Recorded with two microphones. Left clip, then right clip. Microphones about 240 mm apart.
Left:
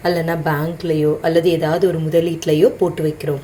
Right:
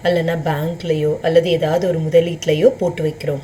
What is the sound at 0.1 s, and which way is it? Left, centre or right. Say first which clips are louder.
A woman's voice: right 1 dB; centre.